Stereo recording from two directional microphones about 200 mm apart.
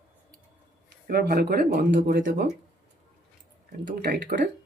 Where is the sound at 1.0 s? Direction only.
50° right (ahead or behind).